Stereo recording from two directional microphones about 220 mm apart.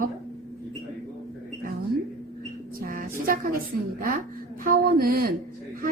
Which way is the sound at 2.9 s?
40° right (ahead or behind).